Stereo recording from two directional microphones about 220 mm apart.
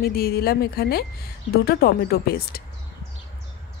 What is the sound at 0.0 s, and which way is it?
Speech, 45° left (ahead or behind).